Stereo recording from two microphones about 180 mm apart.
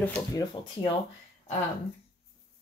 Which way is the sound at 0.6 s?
25° left (ahead or behind).